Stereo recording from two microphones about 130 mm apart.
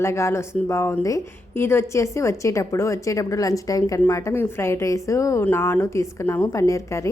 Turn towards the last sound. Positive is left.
turn(degrees=25)  # may be behind; listen again after turning